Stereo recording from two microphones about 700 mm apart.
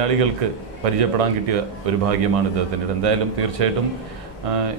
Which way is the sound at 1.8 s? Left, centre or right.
Right.